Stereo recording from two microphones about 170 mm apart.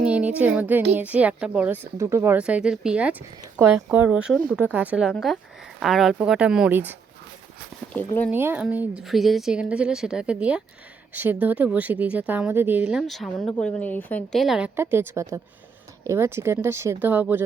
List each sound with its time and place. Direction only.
0.0 s a sound: 10° right (ahead or behind)
0.9 s speech: 10° right (ahead or behind)
7.9 s speech: 10° left (ahead or behind)
8.3 s speech: 10° right (ahead or behind)
14.8 s speech: 15° right (ahead or behind)